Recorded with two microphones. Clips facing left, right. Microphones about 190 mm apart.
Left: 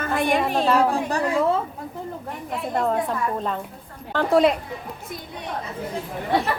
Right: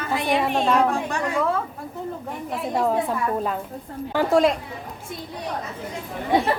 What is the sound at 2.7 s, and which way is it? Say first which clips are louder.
A woman's voice: right 1 dB; 5° right (ahead or behind).